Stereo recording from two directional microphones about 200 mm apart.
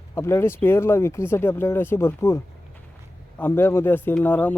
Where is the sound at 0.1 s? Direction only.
15° left (ahead or behind).